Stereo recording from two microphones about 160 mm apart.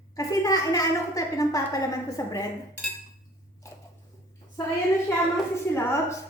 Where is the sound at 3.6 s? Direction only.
20° left (ahead or behind).